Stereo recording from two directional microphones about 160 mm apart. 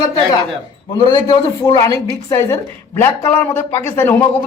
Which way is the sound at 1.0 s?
25° left (ahead or behind).